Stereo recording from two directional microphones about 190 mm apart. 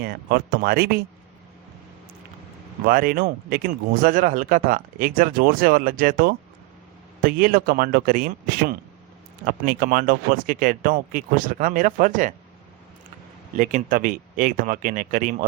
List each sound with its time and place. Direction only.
0.0 s speech: 55° right (ahead or behind)
2.8 s speech: 50° right (ahead or behind)
13.6 s speech: 40° right (ahead or behind)